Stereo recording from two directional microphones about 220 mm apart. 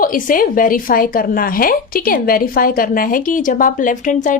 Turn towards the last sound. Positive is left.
turn(degrees=35)  # may be behind; listen again after turning